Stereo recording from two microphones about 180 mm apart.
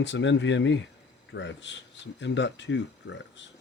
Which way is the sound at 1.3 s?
80° left.